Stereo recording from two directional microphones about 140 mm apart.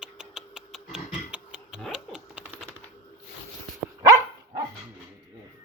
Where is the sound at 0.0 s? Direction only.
5° right (ahead or behind).